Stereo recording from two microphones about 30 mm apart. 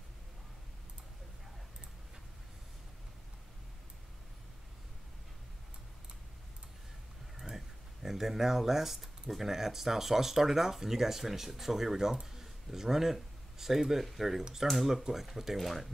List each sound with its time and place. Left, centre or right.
7.3 s a sound: centre
9.3 s speech: centre
14.6 s speech: centre